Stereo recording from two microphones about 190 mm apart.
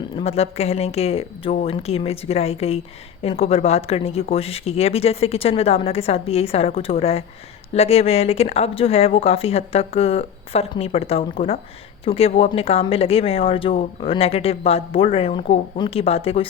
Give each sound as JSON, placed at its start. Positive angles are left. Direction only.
{"t": 0.2, "sound": "speech", "side_deg": 35}